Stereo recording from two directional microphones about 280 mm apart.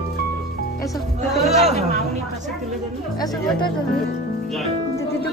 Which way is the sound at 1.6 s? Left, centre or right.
Right.